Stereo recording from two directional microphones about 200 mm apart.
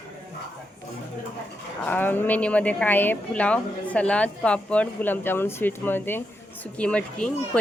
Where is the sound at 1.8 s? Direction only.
10° left (ahead or behind).